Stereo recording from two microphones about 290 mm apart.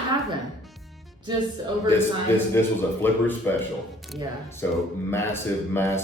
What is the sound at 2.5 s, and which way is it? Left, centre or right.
Speech, centre.